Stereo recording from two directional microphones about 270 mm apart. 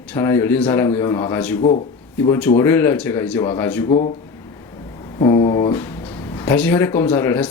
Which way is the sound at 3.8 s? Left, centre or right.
Left.